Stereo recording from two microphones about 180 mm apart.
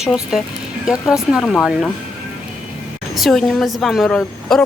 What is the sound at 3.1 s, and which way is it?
A woman's voice, centre (ahead or behind).